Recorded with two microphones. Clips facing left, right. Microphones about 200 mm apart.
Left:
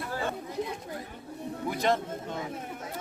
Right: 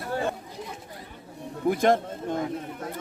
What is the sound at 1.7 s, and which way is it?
Speech, 50° right (ahead or behind).